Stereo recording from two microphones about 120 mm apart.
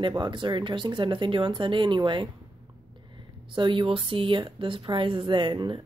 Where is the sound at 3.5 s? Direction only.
45° right (ahead or behind).